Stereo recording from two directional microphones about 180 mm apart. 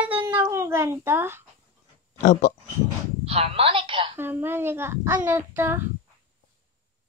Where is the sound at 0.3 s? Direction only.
15° right (ahead or behind).